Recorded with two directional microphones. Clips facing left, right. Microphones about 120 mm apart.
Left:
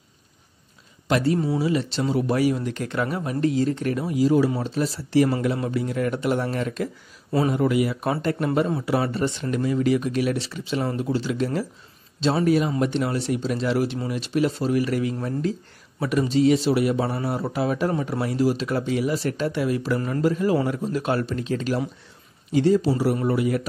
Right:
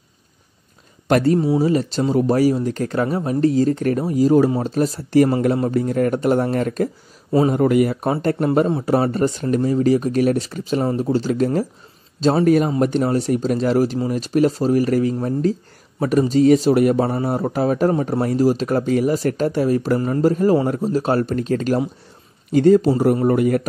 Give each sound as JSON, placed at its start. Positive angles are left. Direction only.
{"t": 1.0, "sound": "a man's voice", "side_deg": -50}